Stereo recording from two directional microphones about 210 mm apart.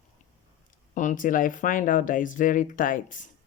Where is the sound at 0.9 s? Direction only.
40° left (ahead or behind).